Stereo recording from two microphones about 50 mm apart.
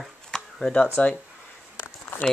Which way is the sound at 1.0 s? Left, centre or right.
Left.